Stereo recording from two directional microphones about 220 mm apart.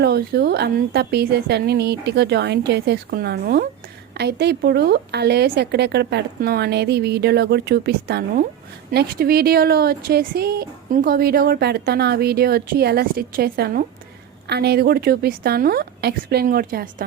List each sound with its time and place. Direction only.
0.0 s a woman's voice: 45° right (ahead or behind)